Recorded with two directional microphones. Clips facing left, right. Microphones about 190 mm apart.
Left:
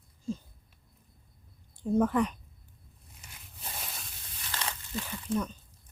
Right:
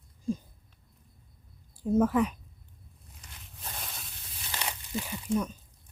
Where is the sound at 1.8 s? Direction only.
5° right (ahead or behind).